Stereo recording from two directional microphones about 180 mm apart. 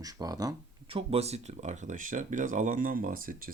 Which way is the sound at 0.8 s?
35° right (ahead or behind).